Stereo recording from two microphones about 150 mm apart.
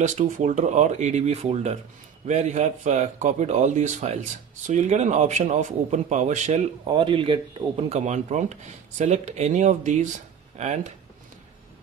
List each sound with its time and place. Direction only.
0.0 s speech: 55° right (ahead or behind)
6.8 s speech: 35° right (ahead or behind); by 10.9 s 50° right (ahead or behind)